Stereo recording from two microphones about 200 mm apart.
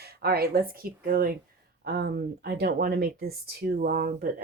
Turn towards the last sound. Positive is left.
turn(degrees=-50)  # may be behind; listen again after turning